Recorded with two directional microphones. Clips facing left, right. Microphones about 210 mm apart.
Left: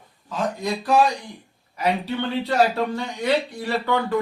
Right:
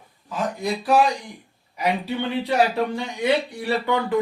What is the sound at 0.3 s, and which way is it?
Speech, 10° right (ahead or behind).